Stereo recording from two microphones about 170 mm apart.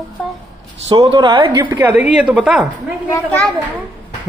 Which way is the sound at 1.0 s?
30° right (ahead or behind).